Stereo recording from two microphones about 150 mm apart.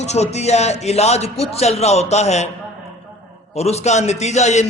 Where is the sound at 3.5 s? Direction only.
45° left (ahead or behind).